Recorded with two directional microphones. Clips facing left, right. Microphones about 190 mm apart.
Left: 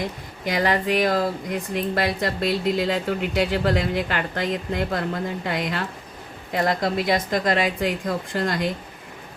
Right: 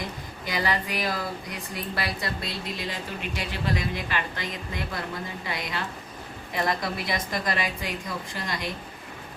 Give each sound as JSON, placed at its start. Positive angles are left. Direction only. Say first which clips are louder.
{"t": 0.4, "sound": "a woman's voice", "louder": "left 7 dB", "side_deg": 55}